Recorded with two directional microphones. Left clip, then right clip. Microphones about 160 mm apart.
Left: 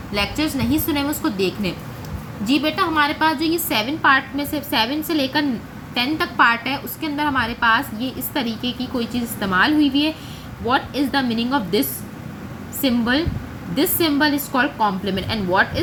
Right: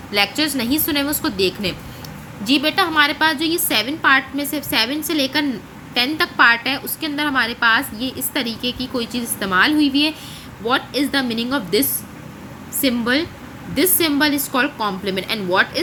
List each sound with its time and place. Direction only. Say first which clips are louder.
0.1 s a woman's voice: right 4 dB; 45° right (ahead or behind)
12.8 s a woman's voice: right 1 dB; 40° right (ahead or behind)